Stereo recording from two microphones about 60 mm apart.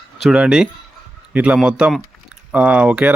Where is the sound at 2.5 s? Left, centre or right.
Right.